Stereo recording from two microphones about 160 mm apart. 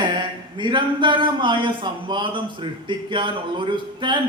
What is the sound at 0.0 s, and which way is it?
A man's voice, 30° right (ahead or behind).